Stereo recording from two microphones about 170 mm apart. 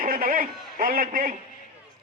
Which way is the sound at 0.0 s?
55° right (ahead or behind).